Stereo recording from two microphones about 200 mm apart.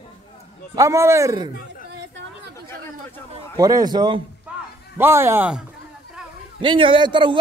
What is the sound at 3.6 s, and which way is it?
Speech, 20° right (ahead or behind).